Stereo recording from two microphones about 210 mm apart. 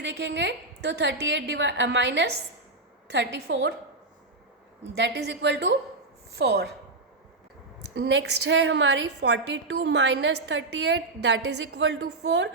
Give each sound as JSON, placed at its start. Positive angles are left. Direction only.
{"t": 0.0, "sound": "a woman's voice", "side_deg": -60}
{"t": 4.8, "sound": "a woman's voice", "side_deg": -55}
{"t": 7.9, "sound": "a woman's voice", "side_deg": -55}